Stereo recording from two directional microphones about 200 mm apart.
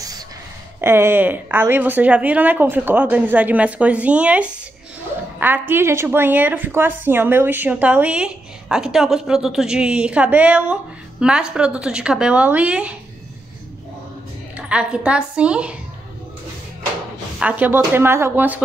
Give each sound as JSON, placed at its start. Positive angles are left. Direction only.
{"t": 0.7, "sound": "a woman's voice", "side_deg": -10}
{"t": 14.6, "sound": "a woman's voice", "side_deg": -5}
{"t": 17.4, "sound": "a woman's voice", "side_deg": -5}